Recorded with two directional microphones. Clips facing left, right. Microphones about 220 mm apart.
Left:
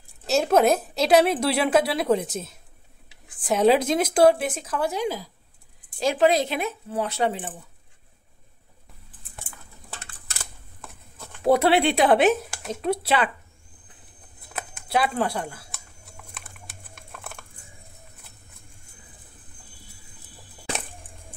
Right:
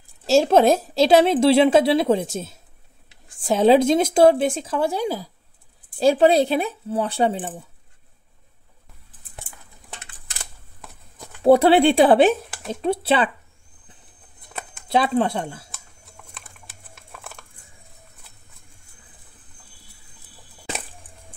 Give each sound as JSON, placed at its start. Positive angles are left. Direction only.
{"t": 0.3, "sound": "speech", "side_deg": -30}
{"t": 11.4, "sound": "speech", "side_deg": -30}
{"t": 12.4, "sound": "speech", "side_deg": 0}
{"t": 12.8, "sound": "speech", "side_deg": -30}
{"t": 14.9, "sound": "speech", "side_deg": -20}
{"t": 16.2, "sound": "a sound", "side_deg": 0}